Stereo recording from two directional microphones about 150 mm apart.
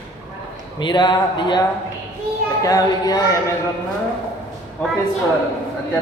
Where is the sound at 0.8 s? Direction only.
30° left (ahead or behind).